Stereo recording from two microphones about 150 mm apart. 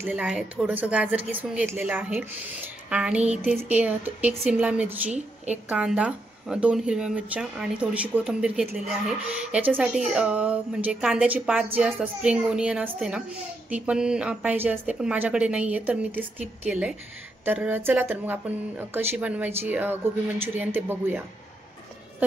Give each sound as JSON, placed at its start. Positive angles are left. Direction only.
{"t": 0.0, "sound": "speech", "side_deg": -10}
{"t": 5.1, "sound": "a woman's voice", "side_deg": -50}
{"t": 5.7, "sound": "speech", "side_deg": -5}
{"t": 9.8, "sound": "speech", "side_deg": -5}